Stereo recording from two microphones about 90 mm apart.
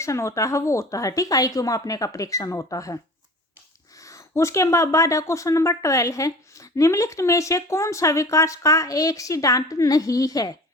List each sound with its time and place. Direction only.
0.0 s speech: 35° left (ahead or behind)